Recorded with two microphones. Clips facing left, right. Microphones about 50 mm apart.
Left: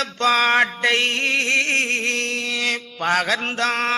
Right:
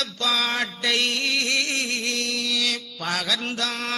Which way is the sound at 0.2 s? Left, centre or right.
Left.